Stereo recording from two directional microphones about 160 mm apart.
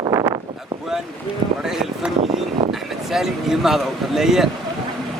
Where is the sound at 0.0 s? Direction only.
25° right (ahead or behind).